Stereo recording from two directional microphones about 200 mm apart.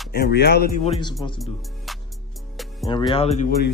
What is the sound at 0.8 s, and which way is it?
Speech, 25° left (ahead or behind).